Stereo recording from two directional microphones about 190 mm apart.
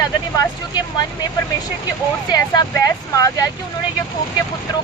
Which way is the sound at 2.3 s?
20° left (ahead or behind).